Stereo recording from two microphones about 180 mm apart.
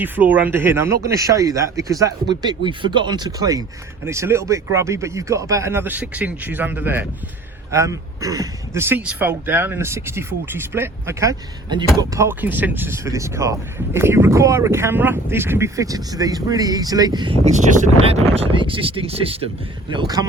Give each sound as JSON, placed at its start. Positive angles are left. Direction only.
{"t": 0.0, "sound": "speech", "side_deg": -10}
{"t": 17.4, "sound": "speech", "side_deg": -40}
{"t": 19.9, "sound": "speech", "side_deg": -20}